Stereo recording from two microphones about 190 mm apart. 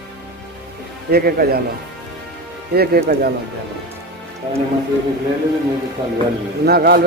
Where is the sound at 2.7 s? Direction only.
55° right (ahead or behind).